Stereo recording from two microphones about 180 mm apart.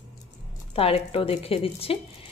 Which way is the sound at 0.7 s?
30° left (ahead or behind).